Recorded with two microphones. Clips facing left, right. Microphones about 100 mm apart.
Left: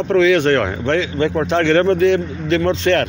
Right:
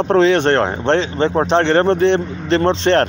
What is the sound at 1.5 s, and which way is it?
Speech, 25° right (ahead or behind).